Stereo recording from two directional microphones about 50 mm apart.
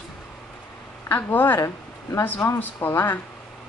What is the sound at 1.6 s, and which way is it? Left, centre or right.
Speech, left.